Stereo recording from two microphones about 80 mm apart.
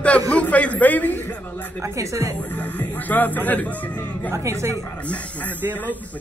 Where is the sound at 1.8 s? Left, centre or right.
Right.